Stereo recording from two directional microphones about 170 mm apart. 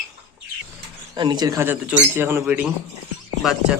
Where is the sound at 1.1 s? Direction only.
25° right (ahead or behind).